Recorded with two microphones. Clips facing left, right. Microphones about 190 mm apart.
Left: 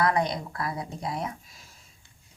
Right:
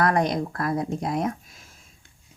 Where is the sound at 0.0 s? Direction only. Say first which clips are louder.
Right 3 dB; 50° right (ahead or behind).